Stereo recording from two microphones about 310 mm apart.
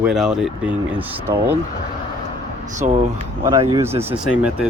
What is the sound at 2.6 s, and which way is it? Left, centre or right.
Speech, right.